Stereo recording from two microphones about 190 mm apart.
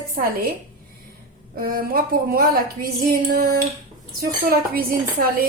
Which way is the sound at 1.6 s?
50° right (ahead or behind).